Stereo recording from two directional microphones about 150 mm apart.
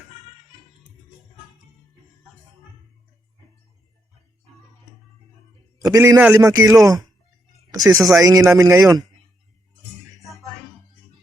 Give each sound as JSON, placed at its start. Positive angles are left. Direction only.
{"t": 5.8, "sound": "a man's voice", "side_deg": -25}